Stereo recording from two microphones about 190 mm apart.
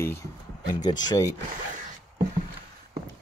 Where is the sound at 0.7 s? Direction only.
20° left (ahead or behind).